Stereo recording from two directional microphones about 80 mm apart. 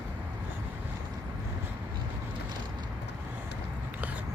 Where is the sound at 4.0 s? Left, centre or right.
Centre.